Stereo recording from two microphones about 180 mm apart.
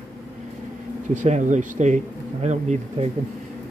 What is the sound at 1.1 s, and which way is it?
Speech, 40° right (ahead or behind).